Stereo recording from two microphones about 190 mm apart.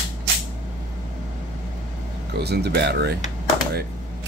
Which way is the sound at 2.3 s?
60° right (ahead or behind).